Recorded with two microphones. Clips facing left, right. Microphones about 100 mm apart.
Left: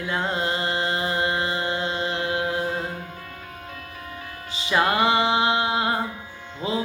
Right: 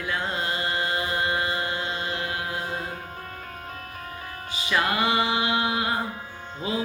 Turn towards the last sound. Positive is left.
turn(degrees=30)  # may be behind; listen again after turning